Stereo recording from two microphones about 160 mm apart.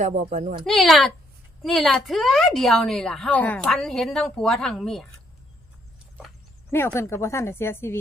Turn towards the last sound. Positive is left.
turn(degrees=15)  # may be behind; listen again after turning